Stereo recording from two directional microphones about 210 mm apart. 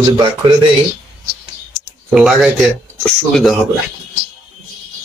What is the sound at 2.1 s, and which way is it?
Speech, centre (ahead or behind).